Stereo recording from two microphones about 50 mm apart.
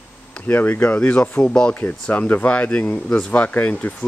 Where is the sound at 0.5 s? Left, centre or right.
Left; by 1.8 s centre.